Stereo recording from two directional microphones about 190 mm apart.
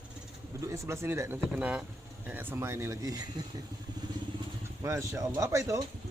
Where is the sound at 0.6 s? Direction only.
15° right (ahead or behind).